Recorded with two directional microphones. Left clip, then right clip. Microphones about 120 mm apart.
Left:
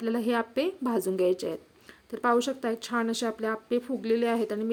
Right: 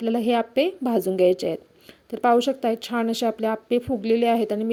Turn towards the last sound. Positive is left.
turn(degrees=-35)  # may be behind; listen again after turning